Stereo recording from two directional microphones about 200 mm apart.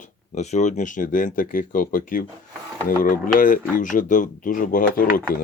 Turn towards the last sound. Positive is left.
turn(degrees=45)  # may be behind; listen again after turning